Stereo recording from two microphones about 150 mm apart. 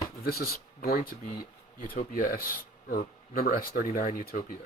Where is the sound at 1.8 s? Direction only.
70° left (ahead or behind).